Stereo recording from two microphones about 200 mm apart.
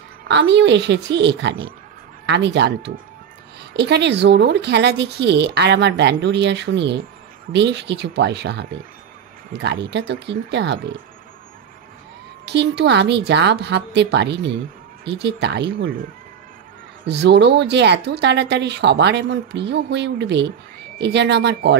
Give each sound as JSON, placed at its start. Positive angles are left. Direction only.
{"t": 0.3, "sound": "speech", "side_deg": -60}
{"t": 12.4, "sound": "speech", "side_deg": -60}
{"t": 17.0, "sound": "speech", "side_deg": -60}